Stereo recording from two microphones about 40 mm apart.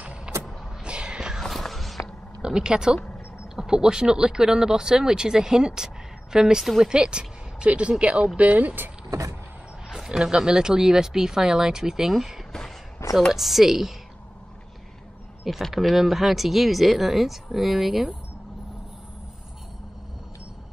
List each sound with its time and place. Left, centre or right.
0.8 s a sound: right
1.4 s walk: centre
2.4 s speech: right
8.4 s speech: right
10.0 s speech: centre
15.7 s speech: centre